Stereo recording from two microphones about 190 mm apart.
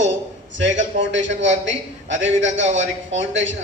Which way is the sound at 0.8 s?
75° right (ahead or behind).